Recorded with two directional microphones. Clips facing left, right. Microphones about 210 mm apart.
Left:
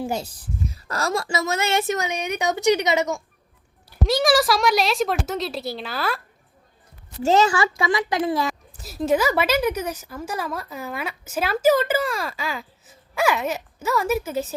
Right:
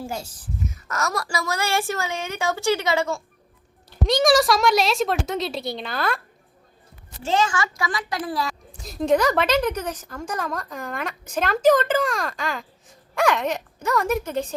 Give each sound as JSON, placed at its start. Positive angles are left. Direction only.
{"t": 0.7, "sound": "speech", "side_deg": 30}
{"t": 3.8, "sound": "a woman's voice", "side_deg": 5}
{"t": 7.2, "sound": "speech", "side_deg": 40}
{"t": 8.8, "sound": "a woman's voice", "side_deg": 5}